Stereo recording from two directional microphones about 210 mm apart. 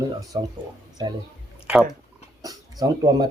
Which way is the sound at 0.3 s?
20° right (ahead or behind).